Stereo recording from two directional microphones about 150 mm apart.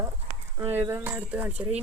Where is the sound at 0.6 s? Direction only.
15° right (ahead or behind).